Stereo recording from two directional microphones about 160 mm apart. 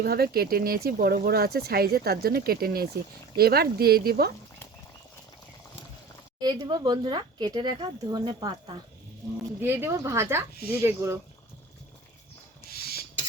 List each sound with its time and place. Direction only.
0.0 s speech: 75° right (ahead or behind)
6.4 s speech: 25° right (ahead or behind)
9.6 s speech: 15° right (ahead or behind)
12.7 s a sound: 75° left (ahead or behind)